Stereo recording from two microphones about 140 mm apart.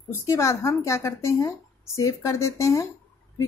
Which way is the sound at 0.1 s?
20° left (ahead or behind).